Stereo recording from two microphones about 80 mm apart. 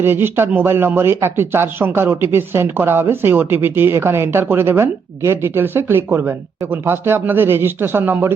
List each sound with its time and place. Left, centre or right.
0.0 s speech: right